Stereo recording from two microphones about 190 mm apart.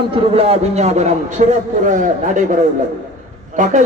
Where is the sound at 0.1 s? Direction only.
30° right (ahead or behind).